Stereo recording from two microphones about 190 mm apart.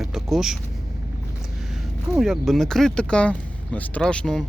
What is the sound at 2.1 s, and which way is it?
Speech, centre (ahead or behind).